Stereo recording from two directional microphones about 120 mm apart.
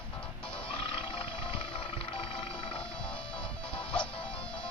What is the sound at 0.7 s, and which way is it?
Music, 45° left (ahead or behind).